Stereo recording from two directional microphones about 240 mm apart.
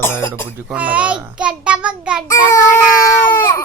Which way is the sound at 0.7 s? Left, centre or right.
Centre.